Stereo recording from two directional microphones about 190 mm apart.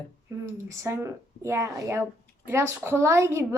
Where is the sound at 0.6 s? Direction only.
15° right (ahead or behind).